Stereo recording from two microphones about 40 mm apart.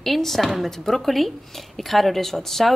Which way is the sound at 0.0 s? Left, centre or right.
Centre.